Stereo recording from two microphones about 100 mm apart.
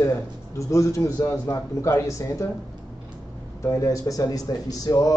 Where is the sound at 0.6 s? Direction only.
30° left (ahead or behind).